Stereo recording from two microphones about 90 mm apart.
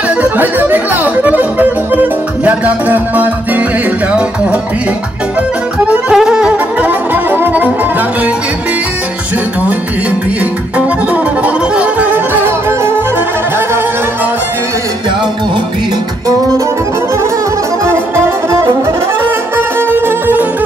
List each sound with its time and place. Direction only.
0.2 s speech: 20° right (ahead or behind)
2.4 s music: 15° right (ahead or behind)
5.9 s music: 10° right (ahead or behind)
11.4 s music: 15° right (ahead or behind)
17.8 s music: 30° right (ahead or behind)
20.1 s music: 20° right (ahead or behind)